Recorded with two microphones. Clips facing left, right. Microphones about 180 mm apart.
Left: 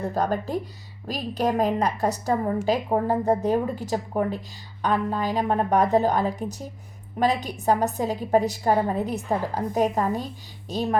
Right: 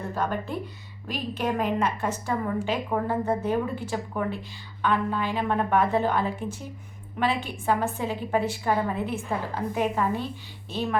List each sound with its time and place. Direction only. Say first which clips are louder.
0.1 s a woman's voice: left 2 dB; 40° left (ahead or behind)